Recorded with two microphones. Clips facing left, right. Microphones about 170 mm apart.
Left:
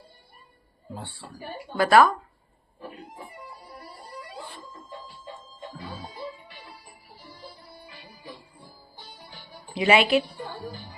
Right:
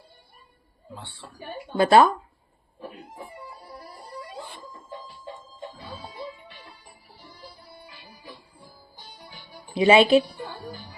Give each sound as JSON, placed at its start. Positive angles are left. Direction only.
{"t": 0.9, "sound": "speech", "side_deg": 40}
{"t": 1.7, "sound": "a woman's voice", "side_deg": -25}
{"t": 9.7, "sound": "a woman's voice", "side_deg": -20}